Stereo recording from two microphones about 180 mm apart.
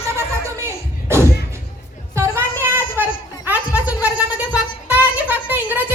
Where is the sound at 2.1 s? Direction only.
15° right (ahead or behind).